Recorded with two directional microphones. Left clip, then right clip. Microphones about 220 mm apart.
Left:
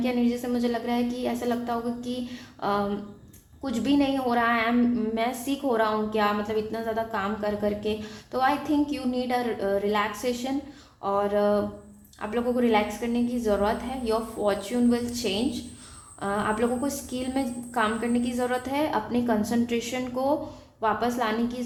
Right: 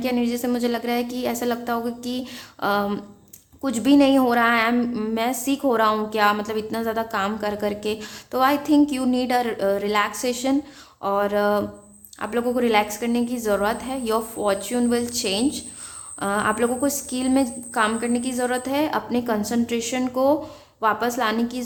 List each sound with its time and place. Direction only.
0.0 s a woman's voice: 25° right (ahead or behind)